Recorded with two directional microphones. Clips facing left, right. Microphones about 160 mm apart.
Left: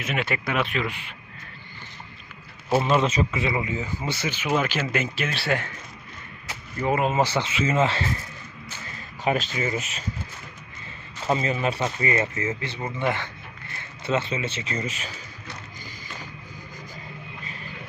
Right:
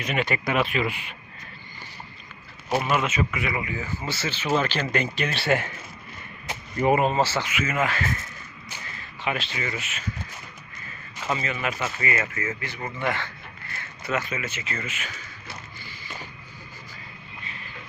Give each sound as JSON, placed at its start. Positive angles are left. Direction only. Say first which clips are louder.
{"t": 0.0, "sound": "speech", "louder": "right 1 dB", "side_deg": 0}
{"t": 2.8, "sound": "speech", "louder": "left 3 dB", "side_deg": 30}
{"t": 6.5, "sound": "a sound", "louder": "right 4 dB", "side_deg": -20}
{"t": 6.9, "sound": "speech", "louder": "right 1 dB", "side_deg": 0}
{"t": 7.2, "sound": "speech", "louder": "left 1 dB", "side_deg": 20}
{"t": 9.0, "sound": "speech", "louder": "left 5 dB", "side_deg": 40}
{"t": 11.3, "sound": "speech", "louder": "left 4 dB", "side_deg": 30}